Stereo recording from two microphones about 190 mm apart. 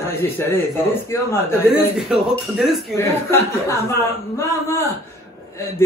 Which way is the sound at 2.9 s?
15° left (ahead or behind).